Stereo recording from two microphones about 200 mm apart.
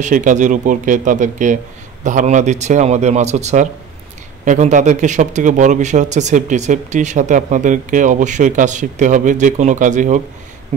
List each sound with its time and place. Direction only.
0.0 s speech: 40° right (ahead or behind)